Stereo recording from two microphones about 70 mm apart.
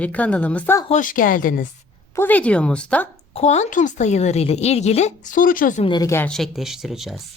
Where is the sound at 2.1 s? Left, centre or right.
Left.